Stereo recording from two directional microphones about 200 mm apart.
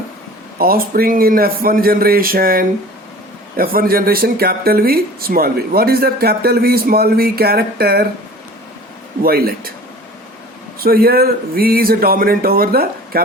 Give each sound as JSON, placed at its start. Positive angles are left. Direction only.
{"t": 0.6, "sound": "speech", "side_deg": -50}
{"t": 9.2, "sound": "speech", "side_deg": -50}
{"t": 10.8, "sound": "speech", "side_deg": -50}